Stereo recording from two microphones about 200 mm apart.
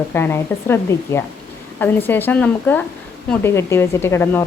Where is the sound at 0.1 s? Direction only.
10° left (ahead or behind).